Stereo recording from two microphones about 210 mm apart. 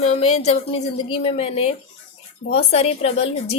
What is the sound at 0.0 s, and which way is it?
A woman's voice, 30° left (ahead or behind).